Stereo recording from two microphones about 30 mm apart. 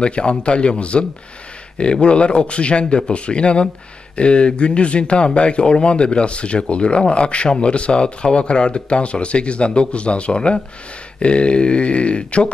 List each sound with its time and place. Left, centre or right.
0.0 s speech: left